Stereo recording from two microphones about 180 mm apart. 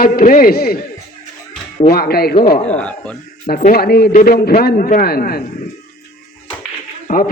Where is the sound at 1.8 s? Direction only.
60° left (ahead or behind).